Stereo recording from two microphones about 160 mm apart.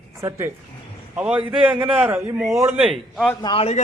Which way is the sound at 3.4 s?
35° left (ahead or behind).